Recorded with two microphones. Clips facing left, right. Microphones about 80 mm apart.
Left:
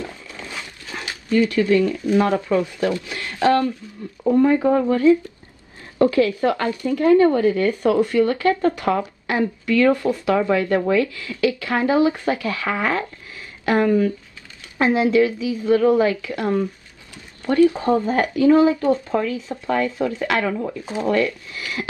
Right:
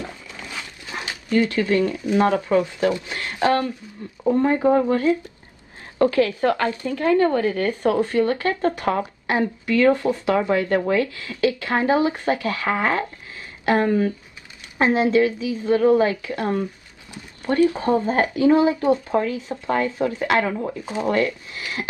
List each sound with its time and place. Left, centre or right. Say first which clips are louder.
1.3 s speech: left 2 dB; right
17.1 s a sound: left 1 dB; right
17.6 s speech: left 2 dB; left
18.0 s speech: left 2 dB; right
19.7 s speech: left 1 dB; right